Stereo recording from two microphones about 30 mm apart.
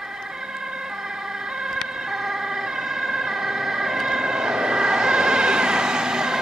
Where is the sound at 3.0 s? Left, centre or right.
Centre.